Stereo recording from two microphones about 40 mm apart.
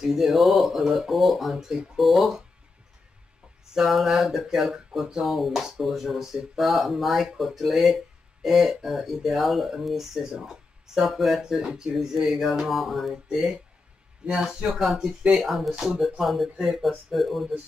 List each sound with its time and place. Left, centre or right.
0.0 s speech: centre
3.8 s speech: centre
15.7 s speech: centre
16.2 s speech: centre